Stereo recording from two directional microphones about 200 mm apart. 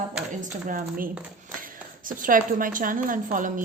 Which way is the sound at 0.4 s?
40° right (ahead or behind).